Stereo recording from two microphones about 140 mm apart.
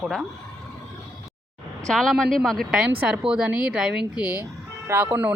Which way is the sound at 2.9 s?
10° right (ahead or behind).